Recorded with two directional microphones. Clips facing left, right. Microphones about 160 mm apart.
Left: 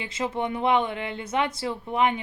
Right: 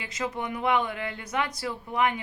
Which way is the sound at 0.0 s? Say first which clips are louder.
Left 4 dB; 25° left (ahead or behind).